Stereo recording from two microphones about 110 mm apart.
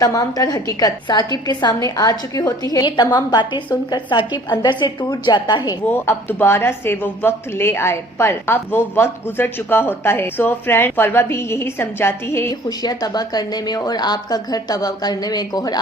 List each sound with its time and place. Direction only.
0.0 s speech: 30° left (ahead or behind)
5.8 s a woman's voice: 20° left (ahead or behind)
12.6 s speech: 35° left (ahead or behind)